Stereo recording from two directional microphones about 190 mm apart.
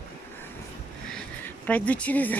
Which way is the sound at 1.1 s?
10° left (ahead or behind).